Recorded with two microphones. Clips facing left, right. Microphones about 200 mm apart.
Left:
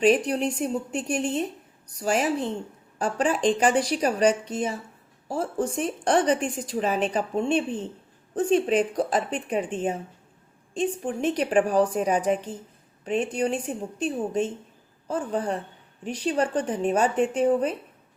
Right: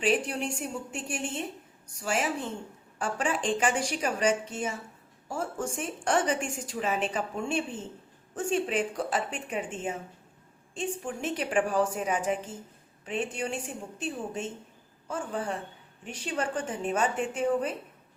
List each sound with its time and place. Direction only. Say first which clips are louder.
0.0 s a woman's voice: left 7 dB; 40° left (ahead or behind)
15.0 s a woman's voice: left 6 dB; 35° left (ahead or behind)